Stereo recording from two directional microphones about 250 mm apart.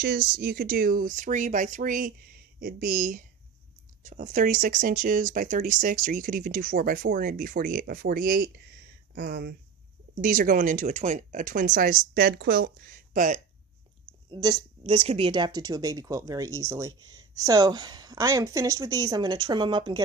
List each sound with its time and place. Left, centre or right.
0.0 s speech: right
14.3 s speech: centre